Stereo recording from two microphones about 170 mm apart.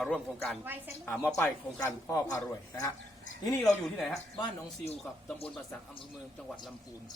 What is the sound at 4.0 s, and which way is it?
Speech, centre (ahead or behind).